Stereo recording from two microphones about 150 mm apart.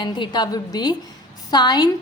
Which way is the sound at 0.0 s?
30° left (ahead or behind).